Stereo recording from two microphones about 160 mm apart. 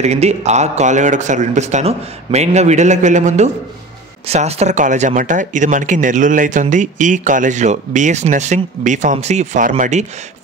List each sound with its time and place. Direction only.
0.0 s speech: 45° right (ahead or behind)